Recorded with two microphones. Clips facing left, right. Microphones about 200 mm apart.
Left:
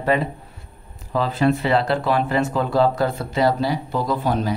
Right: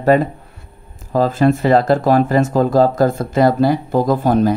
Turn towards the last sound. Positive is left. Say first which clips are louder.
# right 7 dB
turn(degrees=-50)  # may be behind; listen again after turning